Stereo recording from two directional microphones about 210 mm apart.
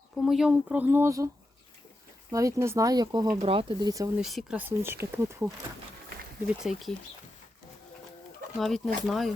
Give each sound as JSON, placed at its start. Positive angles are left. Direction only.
{"t": 0.2, "sound": "speech", "side_deg": 0}
{"t": 2.3, "sound": "speech", "side_deg": -15}
{"t": 3.2, "sound": "speech", "side_deg": -30}
{"t": 4.2, "sound": "speech", "side_deg": 0}
{"t": 6.6, "sound": "speech", "side_deg": 0}
{"t": 8.5, "sound": "speech", "side_deg": 0}